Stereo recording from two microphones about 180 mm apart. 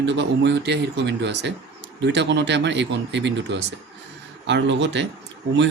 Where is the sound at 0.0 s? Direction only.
75° right (ahead or behind).